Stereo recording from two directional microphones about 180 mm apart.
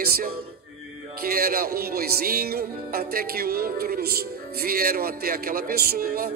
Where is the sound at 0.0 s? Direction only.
60° right (ahead or behind).